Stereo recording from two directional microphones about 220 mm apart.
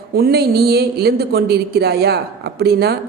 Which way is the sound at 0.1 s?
45° right (ahead or behind).